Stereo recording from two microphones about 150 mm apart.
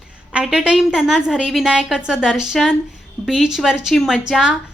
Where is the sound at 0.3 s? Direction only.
5° right (ahead or behind).